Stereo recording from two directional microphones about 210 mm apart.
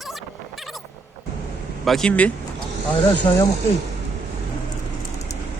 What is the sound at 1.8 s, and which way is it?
Speech, 5° left (ahead or behind).